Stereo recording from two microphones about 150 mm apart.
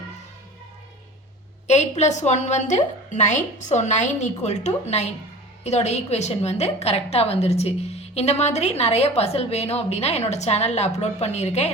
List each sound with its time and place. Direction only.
1.6 s a woman's voice: 50° left (ahead or behind)